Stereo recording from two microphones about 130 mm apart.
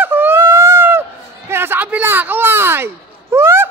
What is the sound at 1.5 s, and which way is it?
Speech, 15° right (ahead or behind).